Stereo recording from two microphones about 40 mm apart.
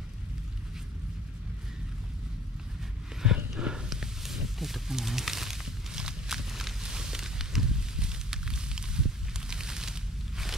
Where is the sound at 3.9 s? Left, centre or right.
Centre.